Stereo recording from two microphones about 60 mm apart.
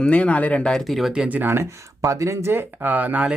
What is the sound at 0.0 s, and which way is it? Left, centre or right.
Speech, left.